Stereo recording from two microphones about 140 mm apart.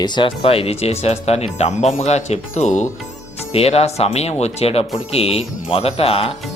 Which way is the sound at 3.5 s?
45° left (ahead or behind).